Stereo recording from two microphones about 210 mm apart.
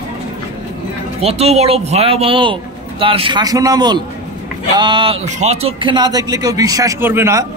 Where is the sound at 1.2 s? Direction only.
30° right (ahead or behind); by 7.4 s 10° right (ahead or behind).